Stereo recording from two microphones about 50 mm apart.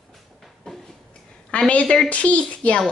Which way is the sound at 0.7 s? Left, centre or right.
Centre.